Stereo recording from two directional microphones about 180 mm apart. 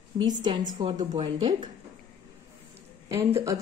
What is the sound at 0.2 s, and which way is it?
A woman's voice, 25° right (ahead or behind).